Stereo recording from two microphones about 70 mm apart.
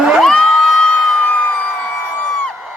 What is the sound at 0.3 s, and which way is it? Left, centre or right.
Crowd, centre.